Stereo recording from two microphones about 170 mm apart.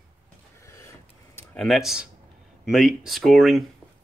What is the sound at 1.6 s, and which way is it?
Speech, centre (ahead or behind).